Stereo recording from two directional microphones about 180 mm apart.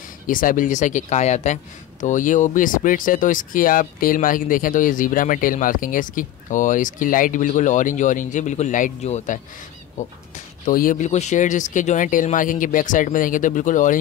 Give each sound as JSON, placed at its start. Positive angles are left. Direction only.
{"t": 0.3, "sound": "speech", "side_deg": 50}